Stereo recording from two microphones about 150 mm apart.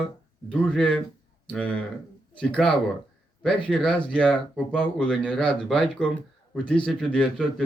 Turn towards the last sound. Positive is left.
turn(degrees=5)  # may be behind; listen again after turning